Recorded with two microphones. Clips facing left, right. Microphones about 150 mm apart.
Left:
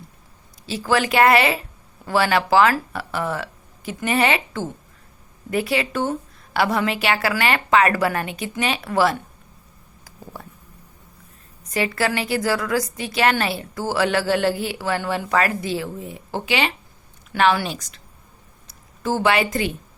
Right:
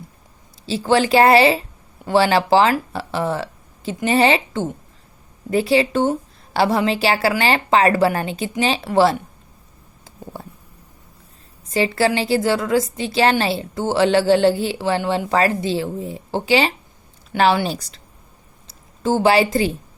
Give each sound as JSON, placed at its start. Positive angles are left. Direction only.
{"t": 0.6, "sound": "a woman's voice", "side_deg": -30}
{"t": 11.6, "sound": "a woman's voice", "side_deg": -30}